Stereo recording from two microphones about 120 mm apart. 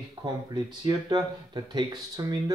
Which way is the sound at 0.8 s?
40° right (ahead or behind).